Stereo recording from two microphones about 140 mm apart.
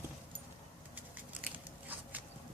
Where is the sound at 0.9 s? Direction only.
10° right (ahead or behind).